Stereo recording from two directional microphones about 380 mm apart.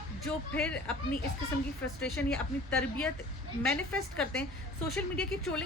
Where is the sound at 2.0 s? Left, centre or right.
Centre.